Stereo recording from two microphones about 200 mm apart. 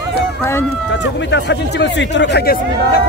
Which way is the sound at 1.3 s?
60° left (ahead or behind).